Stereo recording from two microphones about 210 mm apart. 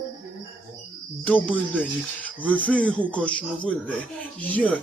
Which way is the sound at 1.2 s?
5° left (ahead or behind).